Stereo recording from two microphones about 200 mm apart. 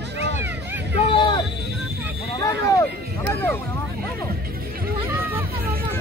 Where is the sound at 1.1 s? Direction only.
25° left (ahead or behind).